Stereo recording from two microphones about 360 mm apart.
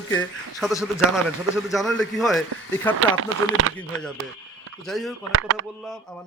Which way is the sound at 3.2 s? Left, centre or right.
Right.